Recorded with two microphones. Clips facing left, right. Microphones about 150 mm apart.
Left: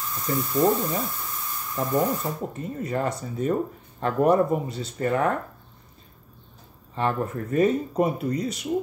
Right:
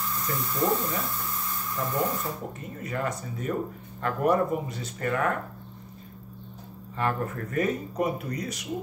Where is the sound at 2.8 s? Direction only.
30° left (ahead or behind).